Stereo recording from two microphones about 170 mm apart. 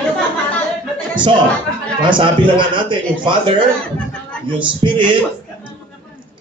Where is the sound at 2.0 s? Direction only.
30° right (ahead or behind).